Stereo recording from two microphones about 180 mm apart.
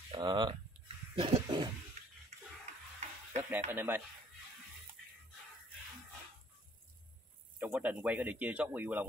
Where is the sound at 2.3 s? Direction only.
40° right (ahead or behind).